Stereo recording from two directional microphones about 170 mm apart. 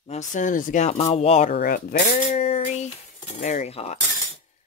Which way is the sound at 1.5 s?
60° left (ahead or behind).